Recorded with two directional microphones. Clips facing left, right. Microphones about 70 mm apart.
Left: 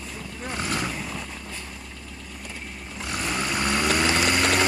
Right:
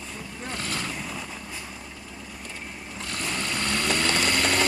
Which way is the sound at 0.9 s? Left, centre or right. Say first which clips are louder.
Left 1 dB; centre.